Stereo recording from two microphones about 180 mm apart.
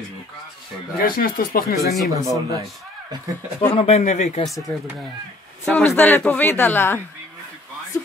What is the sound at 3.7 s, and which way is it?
Speech, 35° left (ahead or behind).